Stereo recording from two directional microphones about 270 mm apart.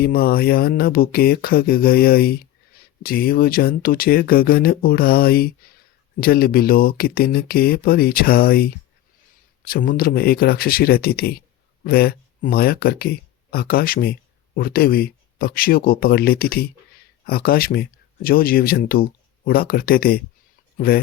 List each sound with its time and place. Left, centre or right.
0.0 s speech: left